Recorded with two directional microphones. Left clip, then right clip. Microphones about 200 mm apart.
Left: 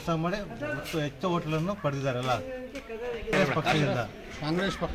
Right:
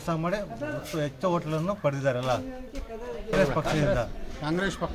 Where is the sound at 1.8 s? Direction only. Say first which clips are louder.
Right 4 dB; 25° right (ahead or behind).